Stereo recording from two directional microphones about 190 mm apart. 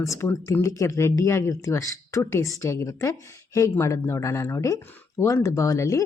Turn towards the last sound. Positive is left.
turn(degrees=15)  # may be behind; listen again after turning